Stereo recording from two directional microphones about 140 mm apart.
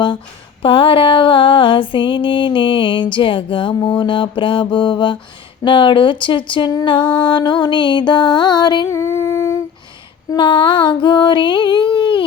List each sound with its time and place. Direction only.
0.6 s mantra: 40° left (ahead or behind); by 9.6 s 20° left (ahead or behind)
10.3 s mantra: 35° left (ahead or behind)